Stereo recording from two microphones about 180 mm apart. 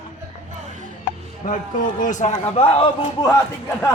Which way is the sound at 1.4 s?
45° left (ahead or behind).